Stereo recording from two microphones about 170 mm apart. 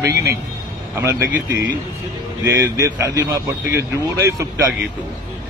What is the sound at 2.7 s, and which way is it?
Speech, 20° right (ahead or behind).